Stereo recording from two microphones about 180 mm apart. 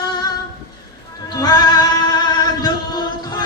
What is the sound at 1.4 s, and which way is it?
Singing, 20° left (ahead or behind).